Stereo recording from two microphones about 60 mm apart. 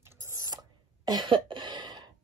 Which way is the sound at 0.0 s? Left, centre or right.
Right.